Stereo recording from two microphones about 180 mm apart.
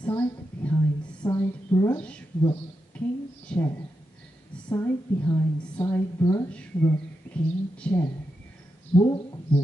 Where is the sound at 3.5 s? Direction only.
5° left (ahead or behind).